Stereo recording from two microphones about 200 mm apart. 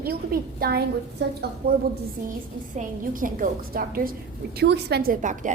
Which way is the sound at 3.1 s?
45° right (ahead or behind).